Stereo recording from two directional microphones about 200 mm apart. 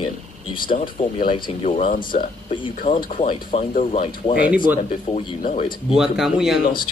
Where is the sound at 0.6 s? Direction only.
45° left (ahead or behind).